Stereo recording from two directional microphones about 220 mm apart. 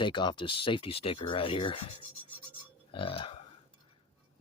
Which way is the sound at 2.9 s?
25° left (ahead or behind).